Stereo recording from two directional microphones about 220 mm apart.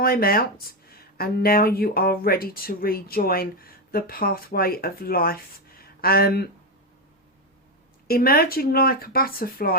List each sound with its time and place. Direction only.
0.0 s speech: 40° left (ahead or behind)
8.0 s speech: 45° left (ahead or behind)